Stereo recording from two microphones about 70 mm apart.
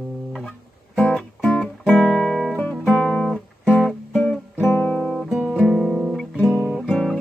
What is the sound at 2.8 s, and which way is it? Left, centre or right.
Guitar, centre.